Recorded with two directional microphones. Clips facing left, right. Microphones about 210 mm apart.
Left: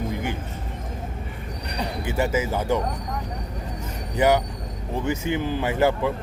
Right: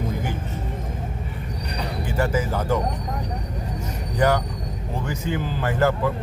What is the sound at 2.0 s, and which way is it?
Speech, 25° left (ahead or behind).